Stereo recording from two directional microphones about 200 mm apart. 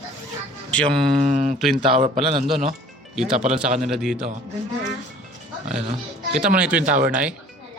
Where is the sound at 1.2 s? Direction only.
40° right (ahead or behind).